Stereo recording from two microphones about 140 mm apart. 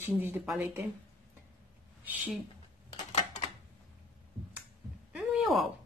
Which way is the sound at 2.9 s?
50° left (ahead or behind).